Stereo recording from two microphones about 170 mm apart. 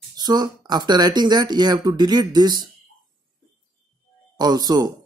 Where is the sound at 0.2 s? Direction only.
25° right (ahead or behind).